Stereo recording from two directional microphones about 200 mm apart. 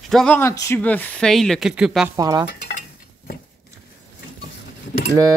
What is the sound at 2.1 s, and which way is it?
Speech, 20° right (ahead or behind).